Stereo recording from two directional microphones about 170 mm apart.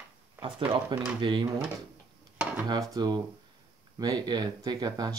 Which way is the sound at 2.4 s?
10° right (ahead or behind).